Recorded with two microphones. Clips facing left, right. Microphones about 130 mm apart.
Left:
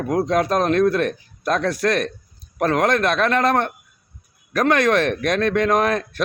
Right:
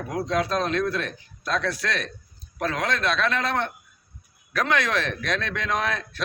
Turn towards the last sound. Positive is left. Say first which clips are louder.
# left 8 dB
turn(degrees=50)  # may be behind; listen again after turning